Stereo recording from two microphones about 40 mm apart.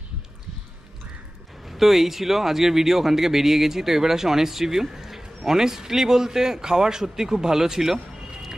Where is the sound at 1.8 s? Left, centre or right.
Centre.